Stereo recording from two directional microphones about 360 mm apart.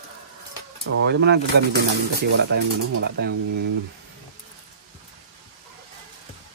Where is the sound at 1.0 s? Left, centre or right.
Right.